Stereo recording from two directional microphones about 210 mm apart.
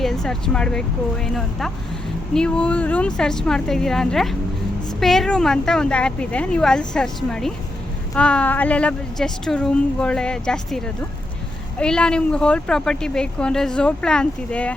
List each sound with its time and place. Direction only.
0.0 s speech: centre (ahead or behind)